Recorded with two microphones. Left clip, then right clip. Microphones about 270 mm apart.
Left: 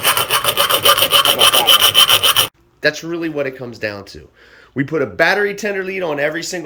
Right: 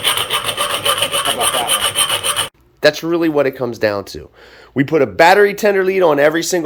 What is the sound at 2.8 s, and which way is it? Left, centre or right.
Speech, centre.